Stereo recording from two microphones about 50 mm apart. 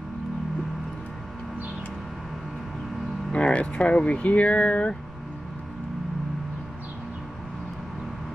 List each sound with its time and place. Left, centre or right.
3.3 s speech: left